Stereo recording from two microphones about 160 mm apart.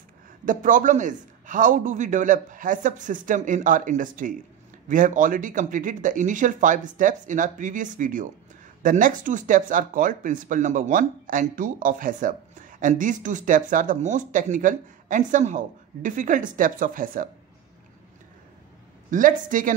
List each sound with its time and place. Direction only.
0.5 s speech: 55° right (ahead or behind)
19.0 s speech: 55° right (ahead or behind)